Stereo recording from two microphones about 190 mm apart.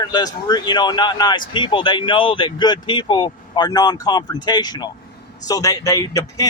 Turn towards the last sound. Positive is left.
turn(degrees=20)  # may be behind; listen again after turning